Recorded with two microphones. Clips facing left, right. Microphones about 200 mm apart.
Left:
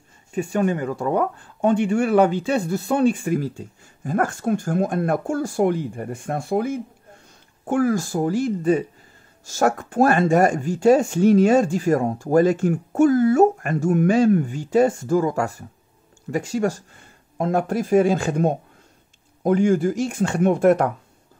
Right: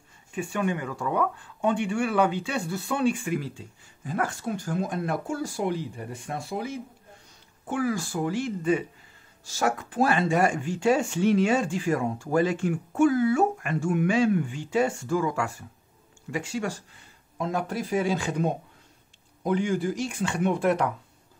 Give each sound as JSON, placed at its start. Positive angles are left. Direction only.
{"t": 0.3, "sound": "speech", "side_deg": 40}